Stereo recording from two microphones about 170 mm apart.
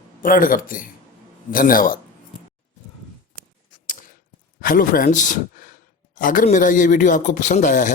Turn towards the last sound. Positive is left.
turn(degrees=50)  # may be behind; listen again after turning